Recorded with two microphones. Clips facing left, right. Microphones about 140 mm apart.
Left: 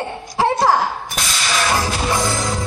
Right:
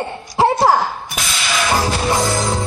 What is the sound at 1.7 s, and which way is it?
Speech, 25° right (ahead or behind).